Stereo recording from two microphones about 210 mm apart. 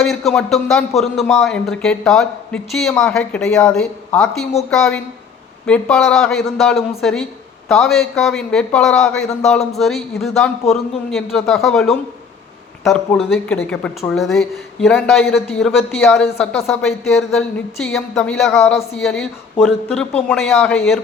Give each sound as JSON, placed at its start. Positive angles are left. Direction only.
{"t": 0.0, "sound": "a man's voice", "side_deg": 0}
{"t": 13.1, "sound": "a man's voice", "side_deg": 0}